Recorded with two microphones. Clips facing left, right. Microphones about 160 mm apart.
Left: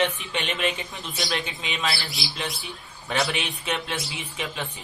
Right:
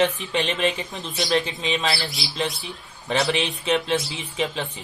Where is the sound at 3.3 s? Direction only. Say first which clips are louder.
Right 6 dB; 30° right (ahead or behind).